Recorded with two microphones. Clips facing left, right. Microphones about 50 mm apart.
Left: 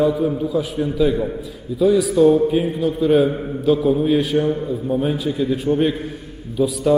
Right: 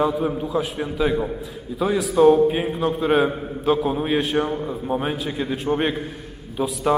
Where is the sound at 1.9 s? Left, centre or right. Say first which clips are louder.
Left 2 dB; right.